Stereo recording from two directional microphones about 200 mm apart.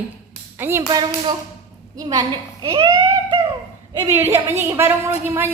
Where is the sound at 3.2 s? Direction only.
25° right (ahead or behind).